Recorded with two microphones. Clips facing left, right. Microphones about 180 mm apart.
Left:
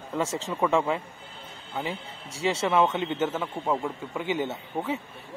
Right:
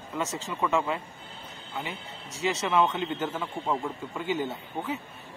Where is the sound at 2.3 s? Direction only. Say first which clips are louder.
Left 2 dB; 30° left (ahead or behind).